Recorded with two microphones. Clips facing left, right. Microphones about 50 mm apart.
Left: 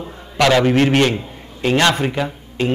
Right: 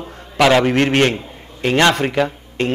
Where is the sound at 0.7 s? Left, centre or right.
Right.